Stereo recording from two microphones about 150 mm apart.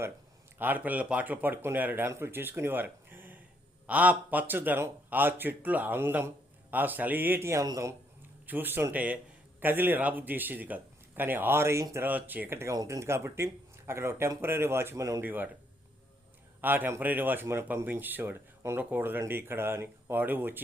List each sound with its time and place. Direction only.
0.6 s a man's voice: 10° right (ahead or behind)
16.6 s a man's voice: 15° right (ahead or behind)